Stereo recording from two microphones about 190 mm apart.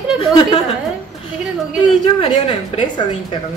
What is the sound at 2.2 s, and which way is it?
Speech, 25° left (ahead or behind).